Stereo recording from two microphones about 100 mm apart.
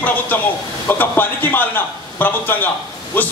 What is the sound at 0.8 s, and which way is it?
A man's voice, 20° left (ahead or behind).